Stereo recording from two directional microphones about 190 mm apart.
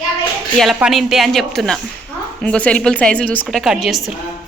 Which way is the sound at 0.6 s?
Centre (ahead or behind).